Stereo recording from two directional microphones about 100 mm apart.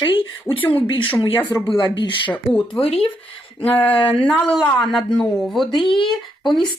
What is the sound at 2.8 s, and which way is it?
Speech, 75° left (ahead or behind).